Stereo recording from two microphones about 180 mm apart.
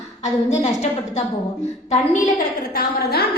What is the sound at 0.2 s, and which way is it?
A woman's voice, 40° left (ahead or behind).